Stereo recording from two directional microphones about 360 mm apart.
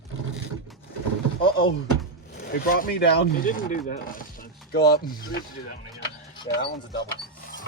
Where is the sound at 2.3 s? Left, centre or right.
Left.